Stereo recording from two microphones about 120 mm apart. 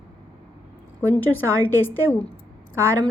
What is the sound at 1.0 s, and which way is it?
A woman's voice, 15° left (ahead or behind).